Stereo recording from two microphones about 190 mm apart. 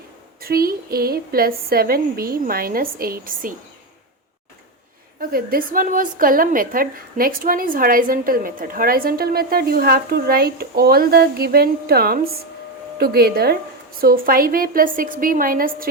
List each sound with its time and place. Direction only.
0.4 s a woman's voice: 50° right (ahead or behind)
5.3 s a woman's voice: 50° right (ahead or behind)